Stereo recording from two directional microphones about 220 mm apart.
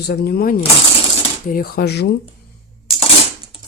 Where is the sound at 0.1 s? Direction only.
45° left (ahead or behind).